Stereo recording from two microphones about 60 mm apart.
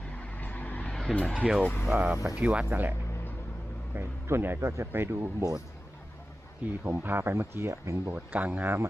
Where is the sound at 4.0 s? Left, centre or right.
Right.